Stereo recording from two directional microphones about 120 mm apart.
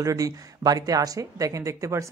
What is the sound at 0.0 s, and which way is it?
Speech, 30° right (ahead or behind).